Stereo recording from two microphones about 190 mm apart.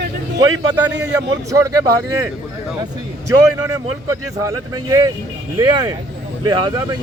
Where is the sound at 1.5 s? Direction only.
15° right (ahead or behind).